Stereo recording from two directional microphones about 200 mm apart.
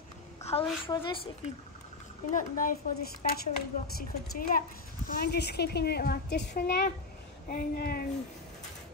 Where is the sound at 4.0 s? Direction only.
45° left (ahead or behind).